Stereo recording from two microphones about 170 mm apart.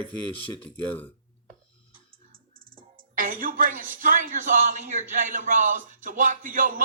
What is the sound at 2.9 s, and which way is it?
Speech, 55° right (ahead or behind).